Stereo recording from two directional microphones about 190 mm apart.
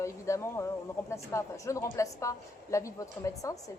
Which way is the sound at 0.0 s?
15° left (ahead or behind).